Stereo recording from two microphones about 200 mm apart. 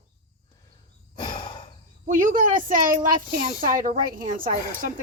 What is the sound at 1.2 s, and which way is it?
Sigh, 20° left (ahead or behind).